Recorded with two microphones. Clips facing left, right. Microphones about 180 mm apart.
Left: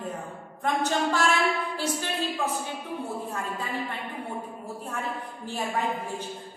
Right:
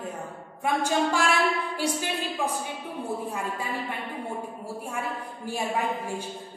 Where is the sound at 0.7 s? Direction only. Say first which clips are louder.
Right 1 dB; 10° right (ahead or behind).